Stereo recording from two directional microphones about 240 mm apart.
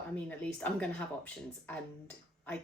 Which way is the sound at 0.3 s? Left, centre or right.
Centre.